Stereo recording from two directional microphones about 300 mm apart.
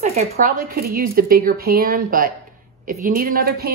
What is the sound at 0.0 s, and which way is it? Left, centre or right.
Speech, right.